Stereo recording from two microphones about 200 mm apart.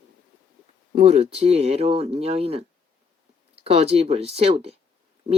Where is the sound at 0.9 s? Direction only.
30° right (ahead or behind).